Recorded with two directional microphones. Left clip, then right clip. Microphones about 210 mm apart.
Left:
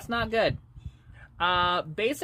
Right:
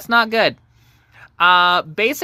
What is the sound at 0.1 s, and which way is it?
Speech, 20° right (ahead or behind).